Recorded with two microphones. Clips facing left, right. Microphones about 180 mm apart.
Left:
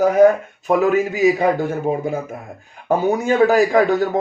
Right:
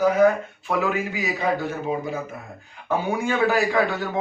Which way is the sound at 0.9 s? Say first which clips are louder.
Left 11 dB; 45° left (ahead or behind).